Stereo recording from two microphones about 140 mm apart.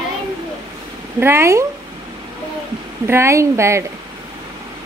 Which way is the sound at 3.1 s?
20° right (ahead or behind).